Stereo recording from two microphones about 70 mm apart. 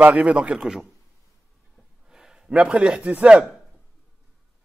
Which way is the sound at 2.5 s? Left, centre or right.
Centre.